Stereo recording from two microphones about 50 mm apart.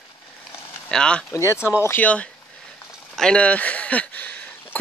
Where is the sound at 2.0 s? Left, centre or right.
Left.